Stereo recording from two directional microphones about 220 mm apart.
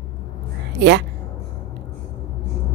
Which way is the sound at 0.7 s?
50° right (ahead or behind).